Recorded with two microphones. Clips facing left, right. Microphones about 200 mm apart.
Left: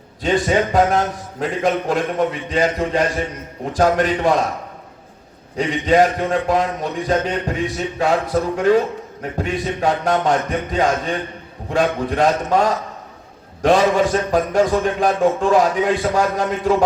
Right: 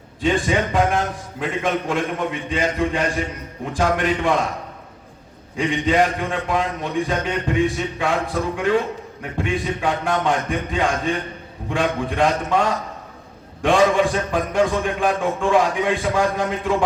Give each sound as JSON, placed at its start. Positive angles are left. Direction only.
{"t": 0.2, "sound": "a man's voice", "side_deg": 40}
{"t": 5.5, "sound": "a man's voice", "side_deg": 40}